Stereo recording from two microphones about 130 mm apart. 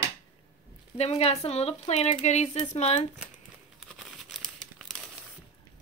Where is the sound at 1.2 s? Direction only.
55° left (ahead or behind).